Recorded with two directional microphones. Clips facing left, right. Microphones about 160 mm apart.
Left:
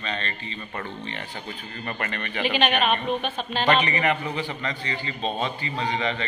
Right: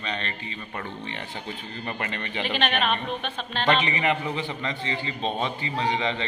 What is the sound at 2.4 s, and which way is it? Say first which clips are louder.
A man's voice: left 3 dB; 5° left (ahead or behind).